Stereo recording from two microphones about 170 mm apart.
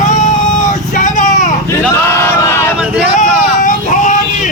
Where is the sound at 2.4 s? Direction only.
15° left (ahead or behind).